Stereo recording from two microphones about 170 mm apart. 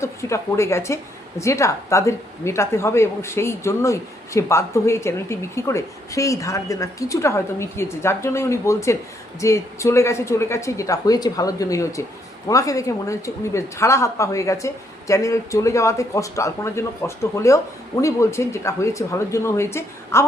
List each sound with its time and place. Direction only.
0.0 s a woman's voice: 15° left (ahead or behind)